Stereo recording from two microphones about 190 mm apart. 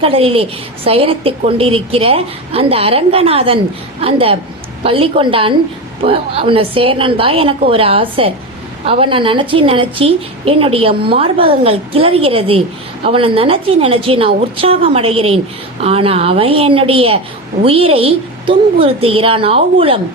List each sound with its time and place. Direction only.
0.0 s a woman's voice: 30° right (ahead or behind)